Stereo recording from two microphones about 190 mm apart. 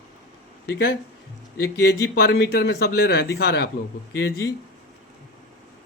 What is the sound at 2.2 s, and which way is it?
A man's voice, 60° left (ahead or behind).